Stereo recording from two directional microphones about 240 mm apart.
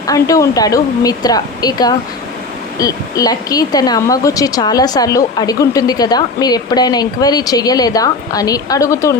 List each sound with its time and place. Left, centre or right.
0.1 s speech: centre